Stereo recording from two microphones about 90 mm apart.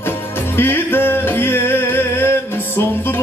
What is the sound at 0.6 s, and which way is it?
Music, 25° left (ahead or behind).